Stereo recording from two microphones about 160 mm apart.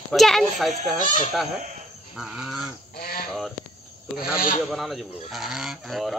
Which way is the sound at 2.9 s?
70° left (ahead or behind).